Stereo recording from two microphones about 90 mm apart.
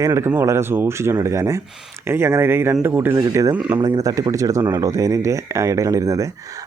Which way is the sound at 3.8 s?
45° right (ahead or behind).